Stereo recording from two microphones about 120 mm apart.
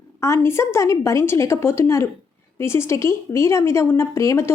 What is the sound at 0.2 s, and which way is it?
A woman's voice, 20° left (ahead or behind).